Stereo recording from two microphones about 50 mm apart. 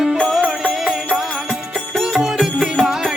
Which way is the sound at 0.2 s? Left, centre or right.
Centre.